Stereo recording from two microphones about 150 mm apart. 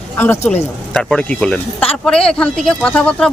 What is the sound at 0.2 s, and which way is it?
Speech, 15° left (ahead or behind).